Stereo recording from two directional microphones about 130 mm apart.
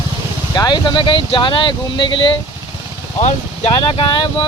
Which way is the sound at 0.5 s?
35° left (ahead or behind).